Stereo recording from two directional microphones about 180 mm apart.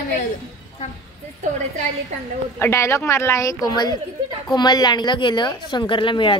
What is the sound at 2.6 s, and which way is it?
A woman's voice, 15° left (ahead or behind).